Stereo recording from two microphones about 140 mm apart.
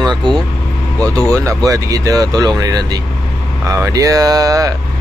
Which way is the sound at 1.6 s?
25° right (ahead or behind).